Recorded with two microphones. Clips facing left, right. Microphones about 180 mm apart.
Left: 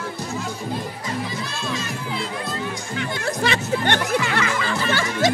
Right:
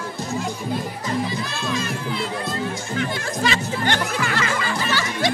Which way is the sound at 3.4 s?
60° left (ahead or behind).